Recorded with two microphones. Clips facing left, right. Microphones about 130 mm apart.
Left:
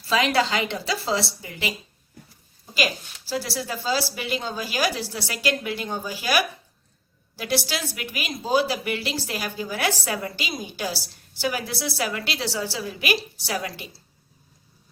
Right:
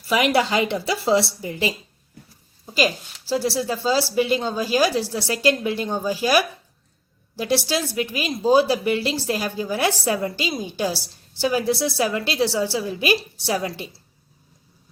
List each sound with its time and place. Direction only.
0.1 s a woman's voice: 20° right (ahead or behind)
3.3 s a woman's voice: 30° right (ahead or behind)